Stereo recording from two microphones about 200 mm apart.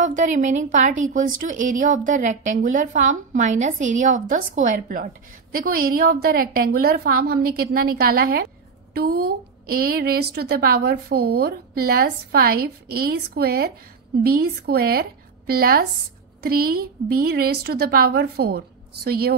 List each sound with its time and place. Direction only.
0.0 s a woman's voice: 40° right (ahead or behind)